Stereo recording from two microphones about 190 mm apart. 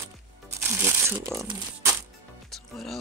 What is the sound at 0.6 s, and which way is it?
Speech, 10° right (ahead or behind).